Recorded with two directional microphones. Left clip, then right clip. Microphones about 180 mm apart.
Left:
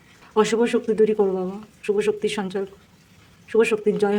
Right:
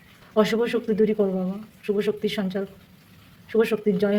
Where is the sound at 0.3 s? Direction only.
35° left (ahead or behind).